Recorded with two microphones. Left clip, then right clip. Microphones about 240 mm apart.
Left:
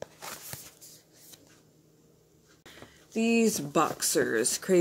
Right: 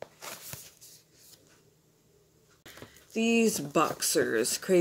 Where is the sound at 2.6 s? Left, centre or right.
Centre.